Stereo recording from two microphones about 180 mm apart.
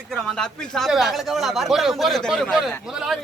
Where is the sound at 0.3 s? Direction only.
Centre (ahead or behind).